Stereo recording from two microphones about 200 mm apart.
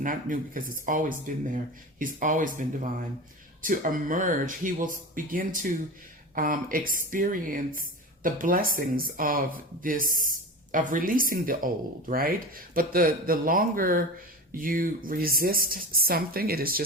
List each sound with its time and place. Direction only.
0.0 s speech: 40° right (ahead or behind)